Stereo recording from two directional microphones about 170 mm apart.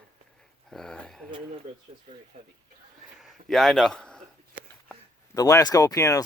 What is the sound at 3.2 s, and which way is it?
A man's voice, centre (ahead or behind).